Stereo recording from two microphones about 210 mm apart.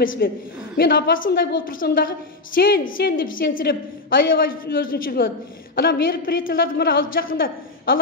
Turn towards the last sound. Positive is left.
turn(degrees=45)  # may be behind; listen again after turning